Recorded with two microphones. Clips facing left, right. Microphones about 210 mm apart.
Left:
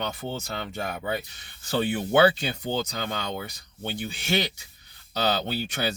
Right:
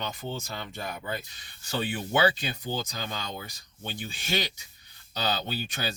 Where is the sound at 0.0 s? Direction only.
65° left (ahead or behind).